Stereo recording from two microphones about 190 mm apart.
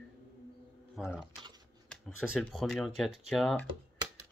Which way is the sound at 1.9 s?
5° left (ahead or behind).